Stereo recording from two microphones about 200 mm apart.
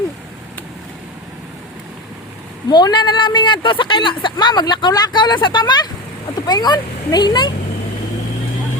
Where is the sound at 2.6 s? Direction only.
20° left (ahead or behind).